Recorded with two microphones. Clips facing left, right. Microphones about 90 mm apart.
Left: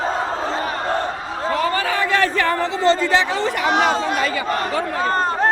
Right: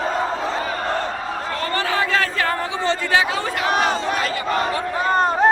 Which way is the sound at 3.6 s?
20° left (ahead or behind).